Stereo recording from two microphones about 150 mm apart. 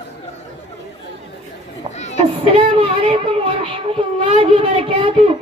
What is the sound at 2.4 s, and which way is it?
Speech, 40° right (ahead or behind).